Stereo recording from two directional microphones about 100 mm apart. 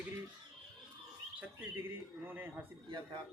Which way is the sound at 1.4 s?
20° right (ahead or behind).